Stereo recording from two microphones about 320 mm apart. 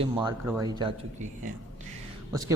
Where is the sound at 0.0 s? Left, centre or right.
Centre.